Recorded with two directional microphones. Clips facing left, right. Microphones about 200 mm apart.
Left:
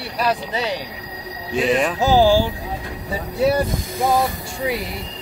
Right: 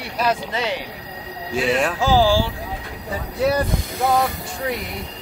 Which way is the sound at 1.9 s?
20° left (ahead or behind).